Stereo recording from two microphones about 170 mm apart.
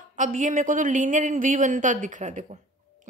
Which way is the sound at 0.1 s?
50° right (ahead or behind).